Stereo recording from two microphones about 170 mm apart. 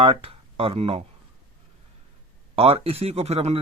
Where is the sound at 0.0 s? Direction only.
35° right (ahead or behind).